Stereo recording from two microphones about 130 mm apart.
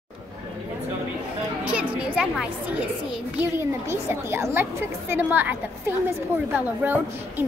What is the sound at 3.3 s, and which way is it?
A woman's voice, 20° right (ahead or behind).